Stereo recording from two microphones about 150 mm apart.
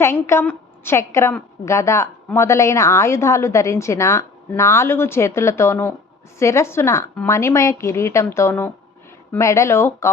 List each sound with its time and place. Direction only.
0.0 s a woman's voice: 15° left (ahead or behind)